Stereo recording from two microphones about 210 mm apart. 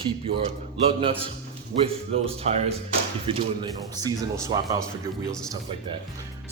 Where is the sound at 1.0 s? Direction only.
25° right (ahead or behind).